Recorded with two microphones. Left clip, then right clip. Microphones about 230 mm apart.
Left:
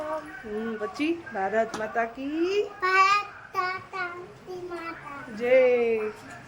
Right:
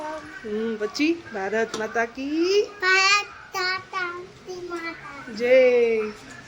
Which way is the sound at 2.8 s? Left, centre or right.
Centre.